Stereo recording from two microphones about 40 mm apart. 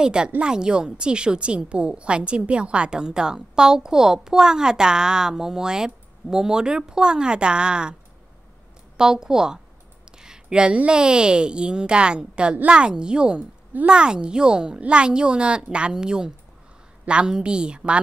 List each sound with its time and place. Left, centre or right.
0.0 s a woman's voice: right
8.9 s a woman's voice: centre
10.0 s clicking: centre
10.9 s a woman's voice: right